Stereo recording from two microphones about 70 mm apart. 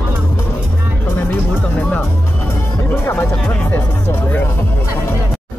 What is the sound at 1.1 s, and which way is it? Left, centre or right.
Music, left.